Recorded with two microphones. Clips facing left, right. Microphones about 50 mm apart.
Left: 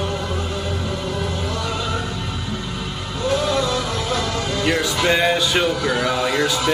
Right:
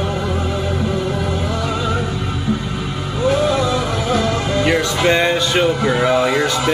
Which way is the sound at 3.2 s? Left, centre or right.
Right.